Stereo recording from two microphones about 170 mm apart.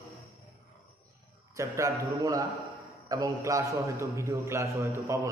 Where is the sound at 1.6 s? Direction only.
20° right (ahead or behind).